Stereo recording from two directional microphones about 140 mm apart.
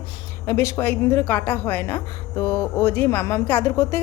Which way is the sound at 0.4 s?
20° left (ahead or behind).